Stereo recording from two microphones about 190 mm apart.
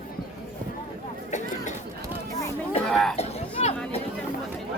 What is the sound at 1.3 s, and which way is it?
Vehicle, 40° left (ahead or behind).